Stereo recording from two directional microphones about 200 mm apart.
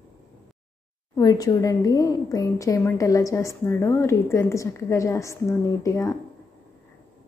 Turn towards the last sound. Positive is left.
turn(degrees=15)  # may be behind; listen again after turning